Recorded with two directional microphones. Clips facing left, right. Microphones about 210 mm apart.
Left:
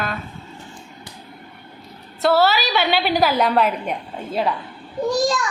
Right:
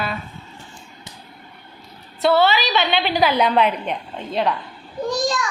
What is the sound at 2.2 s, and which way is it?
A woman's voice, 5° left (ahead or behind).